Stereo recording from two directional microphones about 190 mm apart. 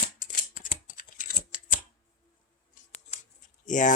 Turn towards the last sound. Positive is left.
turn(degrees=40)  # may be behind; listen again after turning